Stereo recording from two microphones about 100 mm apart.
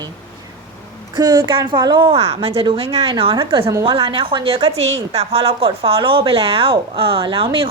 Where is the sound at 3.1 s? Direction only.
60° right (ahead or behind).